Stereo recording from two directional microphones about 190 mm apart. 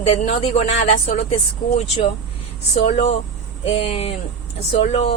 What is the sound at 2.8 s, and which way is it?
Speech, 35° left (ahead or behind).